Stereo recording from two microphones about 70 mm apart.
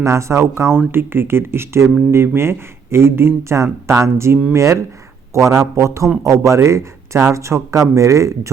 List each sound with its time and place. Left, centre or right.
0.0 s speech: right